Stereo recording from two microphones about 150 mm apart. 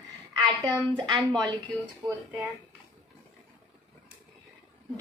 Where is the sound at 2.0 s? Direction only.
30° right (ahead or behind).